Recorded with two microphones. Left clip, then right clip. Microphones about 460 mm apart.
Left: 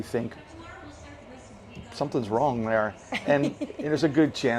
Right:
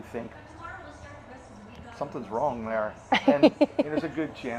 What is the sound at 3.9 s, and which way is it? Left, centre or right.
Speech, left.